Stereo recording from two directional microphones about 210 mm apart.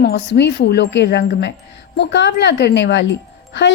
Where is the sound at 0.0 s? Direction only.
50° left (ahead or behind).